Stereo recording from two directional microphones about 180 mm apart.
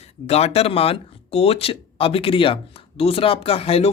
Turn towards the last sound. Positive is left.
turn(degrees=35)  # may be behind; listen again after turning